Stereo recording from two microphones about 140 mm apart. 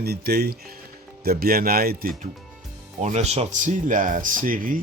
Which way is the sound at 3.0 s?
55° right (ahead or behind).